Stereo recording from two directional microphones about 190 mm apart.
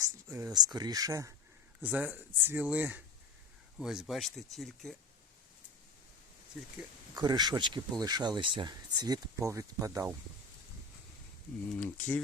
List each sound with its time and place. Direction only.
0.0 s speech: 15° right (ahead or behind)
7.2 s speech: 20° right (ahead or behind)
11.7 s speech: 5° left (ahead or behind)